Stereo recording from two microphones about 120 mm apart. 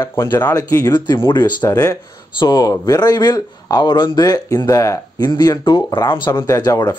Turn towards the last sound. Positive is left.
turn(degrees=30)  # may be behind; listen again after turning